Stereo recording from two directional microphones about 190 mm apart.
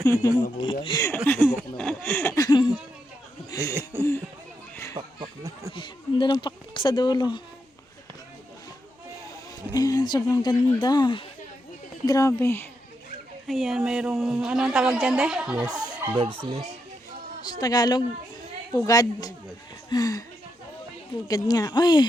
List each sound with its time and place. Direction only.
0.0 s speech: 15° left (ahead or behind)
0.6 s speech: 25° left (ahead or behind)
1.0 s a sound: 10° left (ahead or behind)
2.3 s speech: 20° left (ahead or behind)
3.5 s a sound: 15° left (ahead or behind)
4.9 s speech: 20° right (ahead or behind)
5.7 s speech: 25° left (ahead or behind)
9.7 s speech: 20° left (ahead or behind)
12.0 s a sound: 15° left (ahead or behind)
13.5 s a woman's voice: centre (ahead or behind)
15.7 s speech: 25° right (ahead or behind)
17.4 s speech: 20° left (ahead or behind)
21.2 s speech: 20° left (ahead or behind)